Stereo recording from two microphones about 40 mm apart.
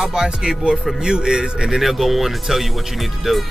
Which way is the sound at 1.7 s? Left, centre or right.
Centre.